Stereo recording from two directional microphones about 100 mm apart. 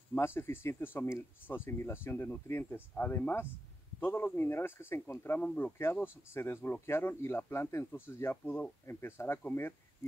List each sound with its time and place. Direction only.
0.1 s speech: 25° left (ahead or behind)